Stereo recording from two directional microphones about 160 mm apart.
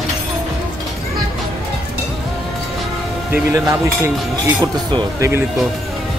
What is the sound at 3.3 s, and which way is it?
Cutlery, 20° right (ahead or behind).